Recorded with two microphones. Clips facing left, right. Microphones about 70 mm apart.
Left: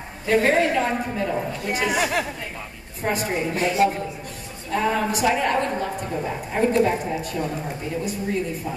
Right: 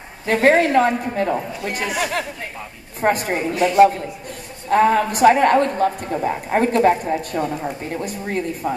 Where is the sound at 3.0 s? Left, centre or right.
Right.